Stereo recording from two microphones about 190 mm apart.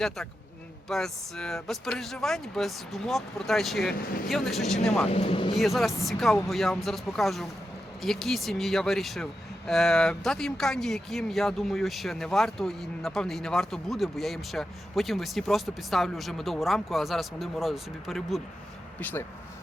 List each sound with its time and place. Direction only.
0.9 s speech: centre (ahead or behind)
3.9 s speech: 50° left (ahead or behind)
4.3 s speech: centre (ahead or behind)
5.0 s speech: 30° left (ahead or behind)
5.5 s speech: centre (ahead or behind)